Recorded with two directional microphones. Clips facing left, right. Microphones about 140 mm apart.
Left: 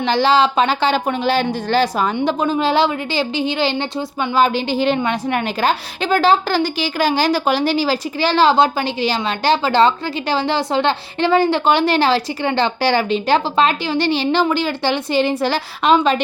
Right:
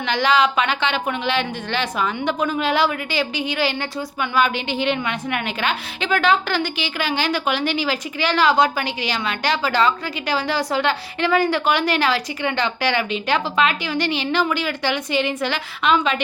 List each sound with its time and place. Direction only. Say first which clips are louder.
0.0 s a woman's voice: left 4 dB; 30° left (ahead or behind)